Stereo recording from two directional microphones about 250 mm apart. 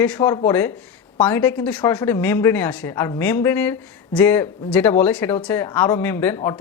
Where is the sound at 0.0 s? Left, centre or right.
Centre.